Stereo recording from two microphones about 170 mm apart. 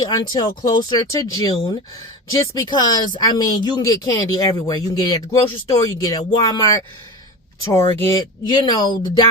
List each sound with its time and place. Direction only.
0.0 s speech: 25° left (ahead or behind)